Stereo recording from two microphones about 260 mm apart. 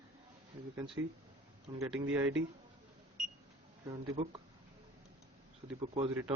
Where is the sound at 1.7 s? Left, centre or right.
Centre.